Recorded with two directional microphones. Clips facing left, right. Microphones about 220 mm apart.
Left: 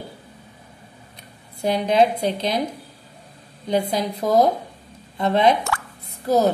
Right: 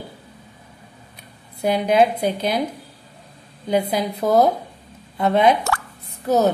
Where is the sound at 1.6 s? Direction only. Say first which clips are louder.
Right 1 dB; 5° right (ahead or behind).